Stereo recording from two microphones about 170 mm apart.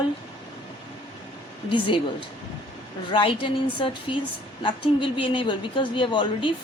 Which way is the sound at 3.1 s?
30° left (ahead or behind).